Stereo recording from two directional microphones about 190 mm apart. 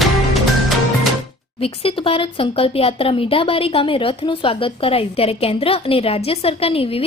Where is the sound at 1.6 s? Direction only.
30° left (ahead or behind).